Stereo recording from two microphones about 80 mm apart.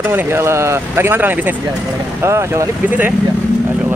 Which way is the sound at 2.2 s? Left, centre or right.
Right.